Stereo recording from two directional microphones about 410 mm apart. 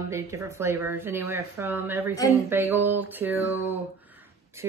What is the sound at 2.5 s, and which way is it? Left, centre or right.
Music, centre.